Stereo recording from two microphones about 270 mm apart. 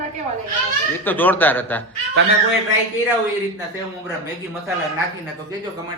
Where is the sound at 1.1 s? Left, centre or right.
Centre.